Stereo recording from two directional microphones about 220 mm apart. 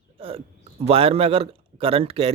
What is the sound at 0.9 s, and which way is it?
Speech, 25° right (ahead or behind).